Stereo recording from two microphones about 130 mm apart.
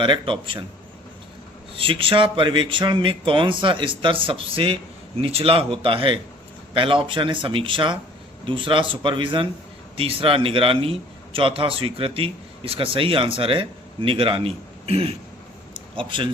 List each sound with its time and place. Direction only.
0.0 s speech: 40° right (ahead or behind)
1.7 s a man's voice: 40° right (ahead or behind)
15.7 s a sound: 40° right (ahead or behind)